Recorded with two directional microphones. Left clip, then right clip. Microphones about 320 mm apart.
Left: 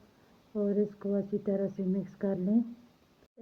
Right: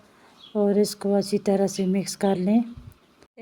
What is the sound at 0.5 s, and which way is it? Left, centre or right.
A woman's voice, right.